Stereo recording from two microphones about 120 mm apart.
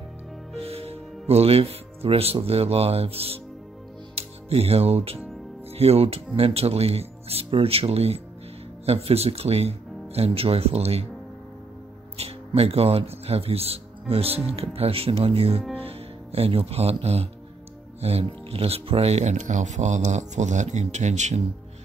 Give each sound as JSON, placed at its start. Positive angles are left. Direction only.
{"t": 0.6, "sound": "speech", "side_deg": -55}
{"t": 4.1, "sound": "music", "side_deg": -55}
{"t": 5.7, "sound": "speech", "side_deg": -55}
{"t": 12.2, "sound": "speech", "side_deg": -55}